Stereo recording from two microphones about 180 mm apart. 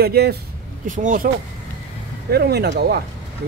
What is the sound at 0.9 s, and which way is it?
Speech, 45° right (ahead or behind).